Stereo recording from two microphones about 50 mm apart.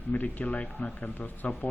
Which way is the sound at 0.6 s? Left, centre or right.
Left.